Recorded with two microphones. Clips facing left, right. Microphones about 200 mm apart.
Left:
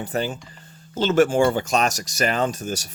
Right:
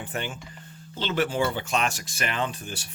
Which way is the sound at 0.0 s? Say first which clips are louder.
Left 7 dB; 40° left (ahead or behind).